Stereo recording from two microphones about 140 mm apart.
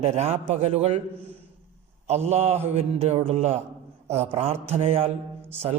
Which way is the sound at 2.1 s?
50° right (ahead or behind).